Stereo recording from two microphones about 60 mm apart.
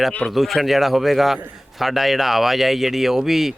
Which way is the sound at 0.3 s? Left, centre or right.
Centre.